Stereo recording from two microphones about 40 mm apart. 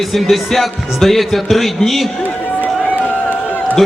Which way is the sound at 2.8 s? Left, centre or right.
Left.